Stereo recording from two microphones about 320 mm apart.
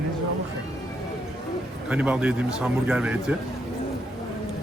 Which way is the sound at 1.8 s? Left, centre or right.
Centre.